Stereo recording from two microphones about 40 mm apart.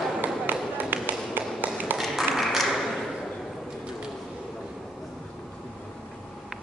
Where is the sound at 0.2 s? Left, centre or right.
Right.